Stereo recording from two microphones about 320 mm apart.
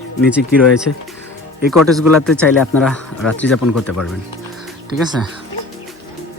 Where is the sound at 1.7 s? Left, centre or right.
Centre.